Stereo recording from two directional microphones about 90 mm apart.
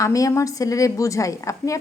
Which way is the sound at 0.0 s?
35° left (ahead or behind).